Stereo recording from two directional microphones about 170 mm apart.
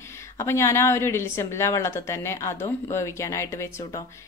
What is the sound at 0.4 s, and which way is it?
A woman's voice, 15° left (ahead or behind).